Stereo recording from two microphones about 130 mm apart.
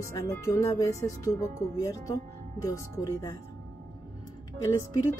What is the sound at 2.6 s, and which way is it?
Speech, 25° left (ahead or behind).